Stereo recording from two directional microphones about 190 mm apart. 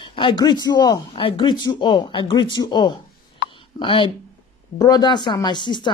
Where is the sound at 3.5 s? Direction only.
25° left (ahead or behind).